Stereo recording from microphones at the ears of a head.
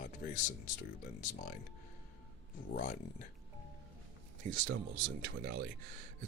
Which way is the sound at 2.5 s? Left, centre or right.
Left.